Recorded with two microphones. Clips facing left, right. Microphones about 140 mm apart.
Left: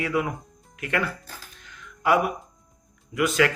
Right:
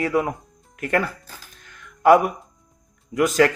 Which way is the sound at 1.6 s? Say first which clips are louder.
Right 8 dB; 50° right (ahead or behind).